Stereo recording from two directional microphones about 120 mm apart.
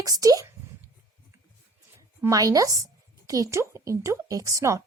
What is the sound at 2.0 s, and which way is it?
A woman's voice, 30° right (ahead or behind).